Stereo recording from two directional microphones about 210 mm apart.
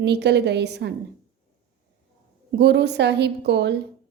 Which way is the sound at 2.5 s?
55° right (ahead or behind).